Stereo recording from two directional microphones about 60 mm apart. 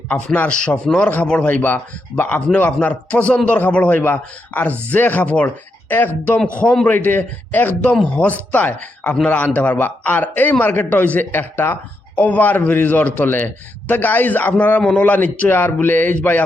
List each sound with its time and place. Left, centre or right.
0.1 s a man's voice: left
1.6 s a man's voice: left
6.6 s a man's voice: centre
6.8 s a man's voice: left